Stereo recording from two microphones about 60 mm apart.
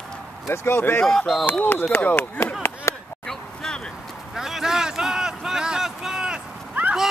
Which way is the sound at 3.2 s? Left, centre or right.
Centre.